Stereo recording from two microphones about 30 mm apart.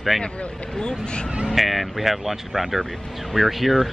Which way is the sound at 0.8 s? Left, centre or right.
Left.